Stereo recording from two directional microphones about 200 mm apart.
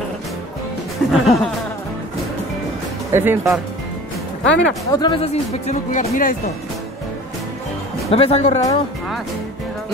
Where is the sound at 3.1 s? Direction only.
10° right (ahead or behind).